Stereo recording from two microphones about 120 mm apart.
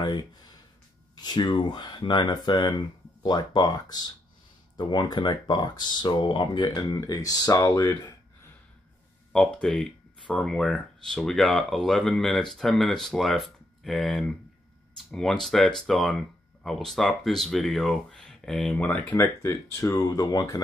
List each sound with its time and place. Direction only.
0.0 s speech: 35° left (ahead or behind)
9.3 s speech: 5° left (ahead or behind)
19.1 s speech: 25° left (ahead or behind)